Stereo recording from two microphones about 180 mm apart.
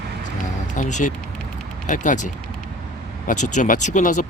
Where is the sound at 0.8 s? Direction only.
45° left (ahead or behind).